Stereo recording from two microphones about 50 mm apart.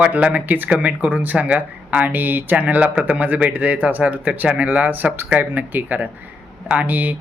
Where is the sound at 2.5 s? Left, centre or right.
Right.